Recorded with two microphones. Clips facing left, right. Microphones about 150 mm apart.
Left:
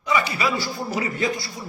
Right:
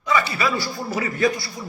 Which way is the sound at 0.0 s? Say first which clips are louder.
Right 1 dB; 15° left (ahead or behind).